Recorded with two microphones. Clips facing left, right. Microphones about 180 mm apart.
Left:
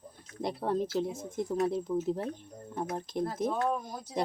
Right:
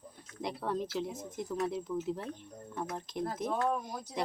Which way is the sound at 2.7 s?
25° left (ahead or behind).